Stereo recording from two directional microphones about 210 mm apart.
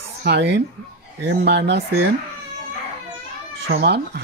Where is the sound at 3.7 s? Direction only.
50° right (ahead or behind).